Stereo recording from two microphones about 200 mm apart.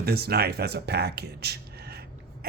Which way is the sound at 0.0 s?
50° right (ahead or behind).